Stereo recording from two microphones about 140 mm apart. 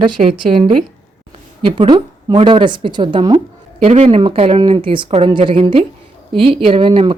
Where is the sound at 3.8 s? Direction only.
55° right (ahead or behind).